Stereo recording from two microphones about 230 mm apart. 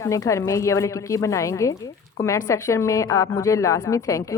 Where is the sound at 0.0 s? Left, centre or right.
Centre.